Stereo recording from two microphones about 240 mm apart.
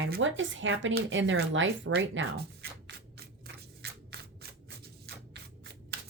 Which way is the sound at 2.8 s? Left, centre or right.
Right.